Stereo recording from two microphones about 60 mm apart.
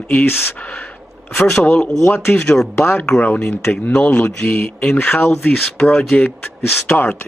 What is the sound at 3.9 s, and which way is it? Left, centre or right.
Speech, left.